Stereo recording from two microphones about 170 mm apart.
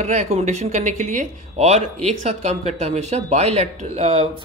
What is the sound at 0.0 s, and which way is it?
Speech, 40° right (ahead or behind).